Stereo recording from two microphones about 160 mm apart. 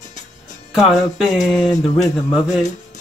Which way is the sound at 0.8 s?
Centre (ahead or behind).